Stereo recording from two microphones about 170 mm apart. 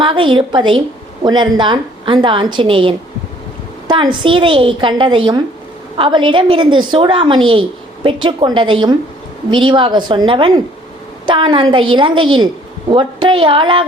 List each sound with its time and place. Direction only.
0.0 s a woman's voice: 30° right (ahead or behind)